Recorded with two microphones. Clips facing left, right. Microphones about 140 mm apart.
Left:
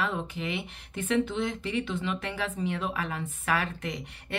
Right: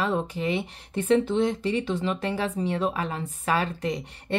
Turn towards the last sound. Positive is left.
turn(degrees=-35)  # may be behind; listen again after turning